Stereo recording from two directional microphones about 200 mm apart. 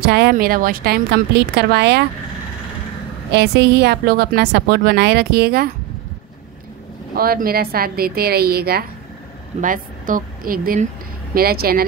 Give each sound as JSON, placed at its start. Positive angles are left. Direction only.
{"t": 0.0, "sound": "a woman's voice", "side_deg": -55}
{"t": 3.3, "sound": "speech", "side_deg": -60}
{"t": 7.2, "sound": "speech", "side_deg": -50}